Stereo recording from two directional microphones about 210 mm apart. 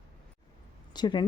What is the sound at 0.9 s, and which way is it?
Speech, 20° left (ahead or behind).